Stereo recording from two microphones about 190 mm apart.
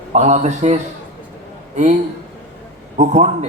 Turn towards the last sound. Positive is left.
turn(degrees=-35)  # may be behind; listen again after turning